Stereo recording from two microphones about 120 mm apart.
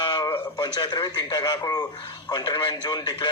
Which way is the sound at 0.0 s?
40° left (ahead or behind).